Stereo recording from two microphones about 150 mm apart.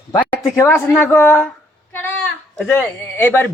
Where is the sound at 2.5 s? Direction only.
10° left (ahead or behind).